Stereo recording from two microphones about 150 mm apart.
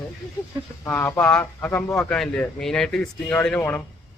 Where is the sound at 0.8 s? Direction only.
15° left (ahead or behind).